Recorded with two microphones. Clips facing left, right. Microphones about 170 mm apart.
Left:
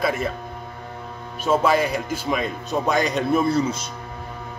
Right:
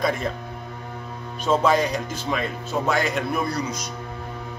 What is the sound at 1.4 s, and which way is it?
A man's voice, 10° left (ahead or behind).